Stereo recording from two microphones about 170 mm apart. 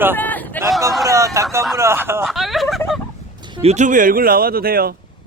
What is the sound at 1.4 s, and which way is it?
Speech, 15° right (ahead or behind).